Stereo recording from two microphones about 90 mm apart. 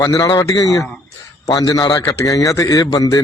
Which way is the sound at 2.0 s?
35° left (ahead or behind).